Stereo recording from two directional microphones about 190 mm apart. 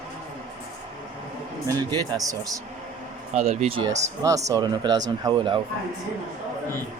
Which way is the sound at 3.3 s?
35° right (ahead or behind).